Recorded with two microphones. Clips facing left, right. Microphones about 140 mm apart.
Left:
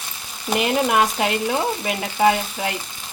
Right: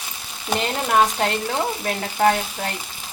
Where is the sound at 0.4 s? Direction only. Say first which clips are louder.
Left 4 dB; 10° left (ahead or behind).